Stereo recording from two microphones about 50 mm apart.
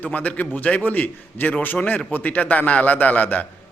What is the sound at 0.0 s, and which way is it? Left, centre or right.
A man's voice, left.